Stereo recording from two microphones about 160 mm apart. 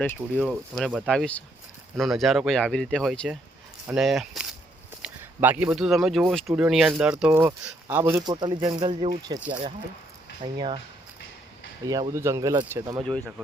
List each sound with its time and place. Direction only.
0.0 s speech: 10° left (ahead or behind); by 10.8 s 30° right (ahead or behind)
11.9 s speech: 25° right (ahead or behind)